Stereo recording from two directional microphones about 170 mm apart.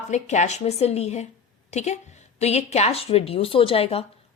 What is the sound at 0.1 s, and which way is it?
A woman's voice, 45° left (ahead or behind).